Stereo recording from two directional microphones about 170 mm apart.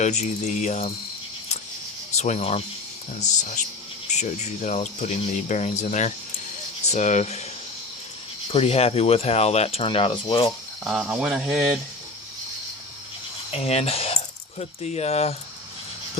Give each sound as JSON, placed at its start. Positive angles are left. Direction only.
{"t": 0.0, "sound": "speech", "side_deg": 45}
{"t": 2.1, "sound": "speech", "side_deg": 40}
{"t": 4.1, "sound": "speech", "side_deg": 45}
{"t": 8.5, "sound": "speech", "side_deg": 35}
{"t": 10.8, "sound": "speech", "side_deg": -5}
{"t": 13.5, "sound": "speech", "side_deg": 35}